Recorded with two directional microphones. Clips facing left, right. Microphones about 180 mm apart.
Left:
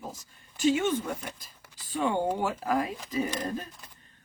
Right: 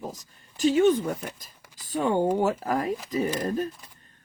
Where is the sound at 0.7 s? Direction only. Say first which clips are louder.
Right 9 dB; 35° right (ahead or behind).